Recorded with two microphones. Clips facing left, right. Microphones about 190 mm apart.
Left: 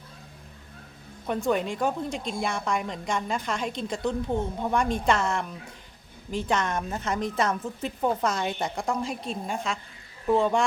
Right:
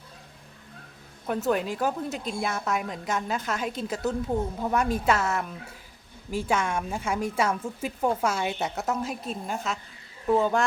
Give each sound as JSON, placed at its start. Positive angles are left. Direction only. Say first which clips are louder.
{"t": 1.3, "sound": "a woman's voice", "louder": "even", "side_deg": -5}